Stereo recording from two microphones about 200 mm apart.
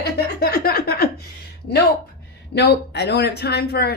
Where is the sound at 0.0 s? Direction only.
50° left (ahead or behind).